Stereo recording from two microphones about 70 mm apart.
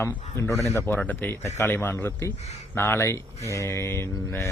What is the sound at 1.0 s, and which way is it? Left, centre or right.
Speech, left.